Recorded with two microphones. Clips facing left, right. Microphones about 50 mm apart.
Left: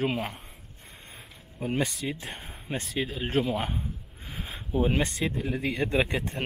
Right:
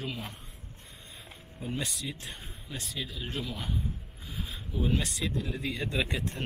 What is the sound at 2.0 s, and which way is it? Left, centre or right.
Speech, left.